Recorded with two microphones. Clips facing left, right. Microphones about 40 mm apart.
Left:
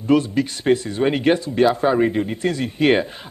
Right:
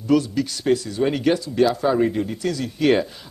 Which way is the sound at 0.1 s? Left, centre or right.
Left.